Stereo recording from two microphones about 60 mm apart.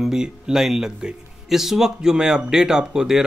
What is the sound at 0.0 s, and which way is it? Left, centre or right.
Speech, centre.